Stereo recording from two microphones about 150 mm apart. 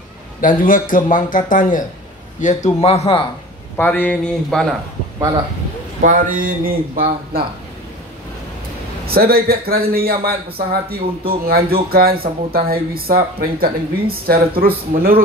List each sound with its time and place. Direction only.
0.4 s a man's voice: 65° left (ahead or behind)
2.4 s speech: 50° left (ahead or behind)
3.7 s speech: 10° left (ahead or behind)
6.0 s speech: 65° right (ahead or behind)
9.0 s a man's voice: 90° right